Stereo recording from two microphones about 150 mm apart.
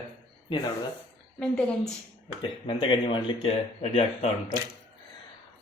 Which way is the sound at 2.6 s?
35° left (ahead or behind).